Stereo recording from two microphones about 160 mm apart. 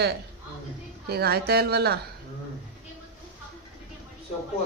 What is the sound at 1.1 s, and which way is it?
Speech, 80° right.